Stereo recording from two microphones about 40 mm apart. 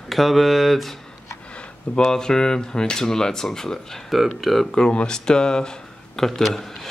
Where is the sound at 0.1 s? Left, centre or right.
Centre.